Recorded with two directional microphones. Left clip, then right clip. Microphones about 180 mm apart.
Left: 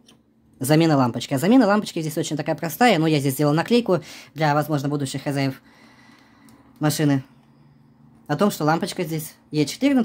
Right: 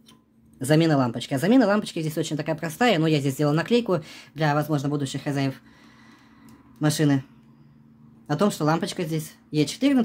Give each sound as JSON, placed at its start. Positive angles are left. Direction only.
{"t": 0.6, "sound": "speech", "side_deg": 20}
{"t": 6.8, "sound": "speech", "side_deg": 15}
{"t": 8.3, "sound": "speech", "side_deg": 15}